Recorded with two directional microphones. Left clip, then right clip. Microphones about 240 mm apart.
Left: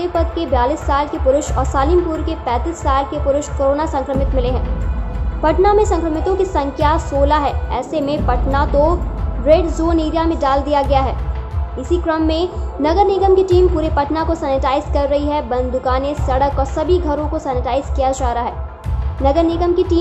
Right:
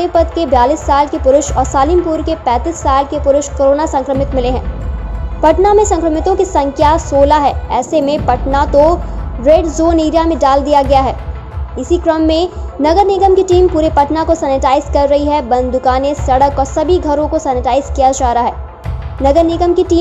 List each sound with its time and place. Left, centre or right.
0.0 s a child's voice: centre